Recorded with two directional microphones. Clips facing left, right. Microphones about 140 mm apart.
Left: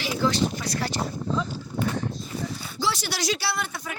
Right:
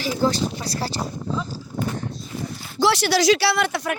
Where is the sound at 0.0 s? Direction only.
40° right (ahead or behind).